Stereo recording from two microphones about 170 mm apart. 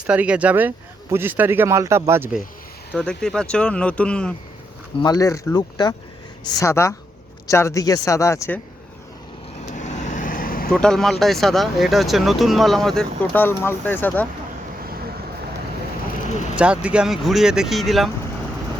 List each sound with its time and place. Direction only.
0.1 s speech: 5° right (ahead or behind)
2.9 s speech: 5° left (ahead or behind)
5.0 s speech: 20° left (ahead or behind)
9.7 s vehicle: 45° left (ahead or behind)
10.7 s speech: 5° left (ahead or behind)
16.3 s speech: 45° left (ahead or behind)
16.6 s speech: 5° right (ahead or behind)